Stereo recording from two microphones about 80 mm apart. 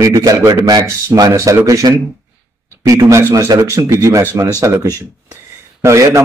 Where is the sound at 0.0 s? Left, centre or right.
Right.